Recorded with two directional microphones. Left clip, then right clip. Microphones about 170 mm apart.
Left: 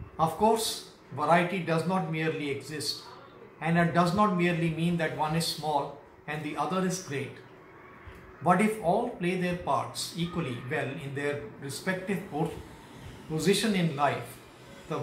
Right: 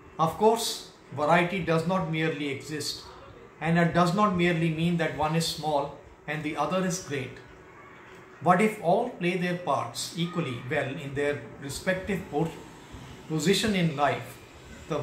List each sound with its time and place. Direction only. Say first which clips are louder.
0.2 s speech: right 2 dB; 10° right (ahead or behind)
8.5 s speech: right 2 dB; 10° right (ahead or behind)
13.3 s speech: right 1 dB; 5° right (ahead or behind)